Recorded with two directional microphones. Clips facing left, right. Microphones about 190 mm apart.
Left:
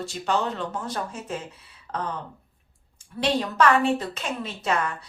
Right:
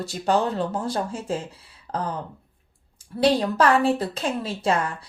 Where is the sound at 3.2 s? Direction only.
35° right (ahead or behind).